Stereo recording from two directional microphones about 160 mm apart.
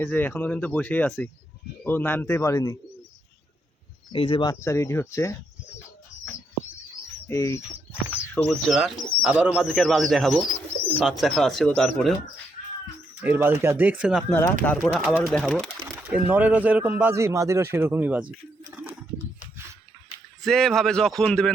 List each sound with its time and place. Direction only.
0.0 s speech: 10° left (ahead or behind)
4.1 s speech: 35° left (ahead or behind)
4.6 s speech: 20° left (ahead or behind)
7.3 s speech: 20° left (ahead or behind)
8.4 s a man's voice: centre (ahead or behind)
9.6 s speech: 5° left (ahead or behind)
13.2 s a man's voice: 10° right (ahead or behind)
14.3 s speech: 10° left (ahead or behind)
16.0 s a man's voice: 10° right (ahead or behind)
20.4 s speech: 5° left (ahead or behind)